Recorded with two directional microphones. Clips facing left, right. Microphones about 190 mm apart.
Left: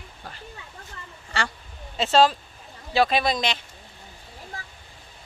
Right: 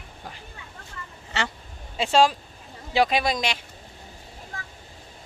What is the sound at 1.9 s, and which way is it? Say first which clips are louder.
Speech: left 1 dB; 10° right (ahead or behind).